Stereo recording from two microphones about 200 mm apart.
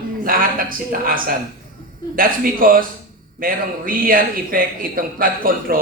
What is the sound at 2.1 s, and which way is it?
A man's voice, 45° right (ahead or behind).